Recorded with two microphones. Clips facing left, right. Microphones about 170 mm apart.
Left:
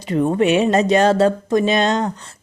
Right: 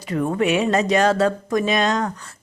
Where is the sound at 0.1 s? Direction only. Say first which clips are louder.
Left 4 dB; 25° left (ahead or behind).